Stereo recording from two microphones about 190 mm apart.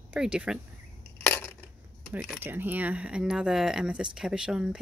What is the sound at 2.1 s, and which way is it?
Speech, 5° right (ahead or behind).